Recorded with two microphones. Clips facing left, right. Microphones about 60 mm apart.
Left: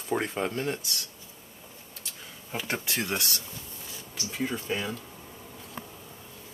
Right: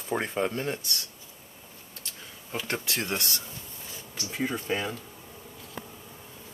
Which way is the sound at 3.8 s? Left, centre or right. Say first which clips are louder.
Even; right.